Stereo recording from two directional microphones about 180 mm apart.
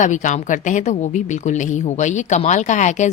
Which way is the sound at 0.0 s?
45° left (ahead or behind).